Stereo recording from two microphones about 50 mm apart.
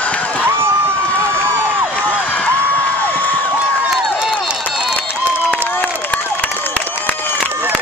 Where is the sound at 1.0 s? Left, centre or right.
Left.